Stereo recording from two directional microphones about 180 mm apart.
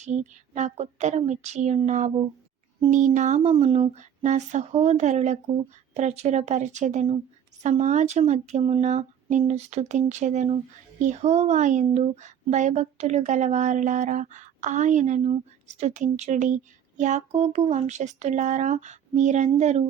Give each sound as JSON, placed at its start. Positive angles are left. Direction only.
{"t": 0.0, "sound": "speech", "side_deg": -40}